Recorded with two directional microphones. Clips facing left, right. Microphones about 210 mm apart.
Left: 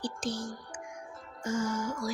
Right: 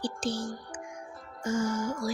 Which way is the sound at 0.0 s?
30° right (ahead or behind).